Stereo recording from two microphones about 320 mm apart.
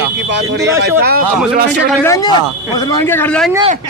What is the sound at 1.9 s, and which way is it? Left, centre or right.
Speech, centre.